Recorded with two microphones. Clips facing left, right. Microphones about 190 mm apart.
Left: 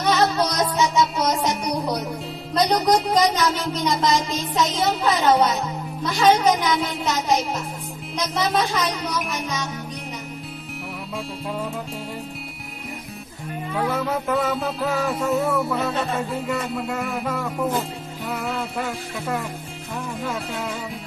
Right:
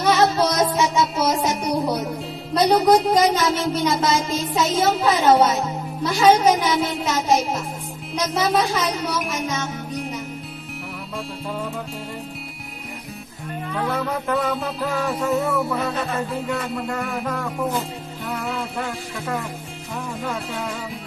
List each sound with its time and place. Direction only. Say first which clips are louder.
0.0 s music: right 2 dB; 10° right (ahead or behind)
6.0 s speech: right 2 dB; 5° right (ahead or behind)
7.2 s music: right 2 dB; 5° right (ahead or behind)
13.7 s music: left 1 dB; 5° left (ahead or behind)